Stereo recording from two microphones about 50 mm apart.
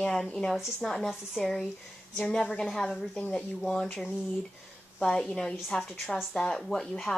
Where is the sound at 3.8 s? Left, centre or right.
Left.